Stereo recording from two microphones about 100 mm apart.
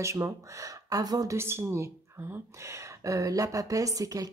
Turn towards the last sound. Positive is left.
turn(degrees=-35)  # may be behind; listen again after turning